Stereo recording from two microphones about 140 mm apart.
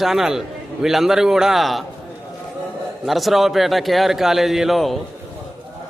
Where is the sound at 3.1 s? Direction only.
Centre (ahead or behind).